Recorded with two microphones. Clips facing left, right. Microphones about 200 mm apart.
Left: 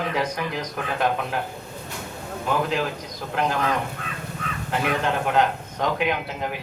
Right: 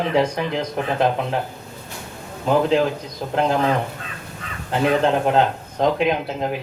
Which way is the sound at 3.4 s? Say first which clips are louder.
Right 5 dB; 30° right (ahead or behind).